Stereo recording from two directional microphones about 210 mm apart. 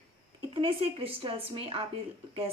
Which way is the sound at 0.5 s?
25° right (ahead or behind).